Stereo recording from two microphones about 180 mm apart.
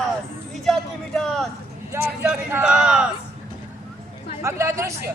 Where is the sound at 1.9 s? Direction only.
10° right (ahead or behind).